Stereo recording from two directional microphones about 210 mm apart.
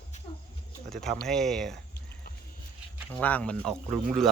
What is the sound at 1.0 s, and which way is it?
Speech, centre (ahead or behind).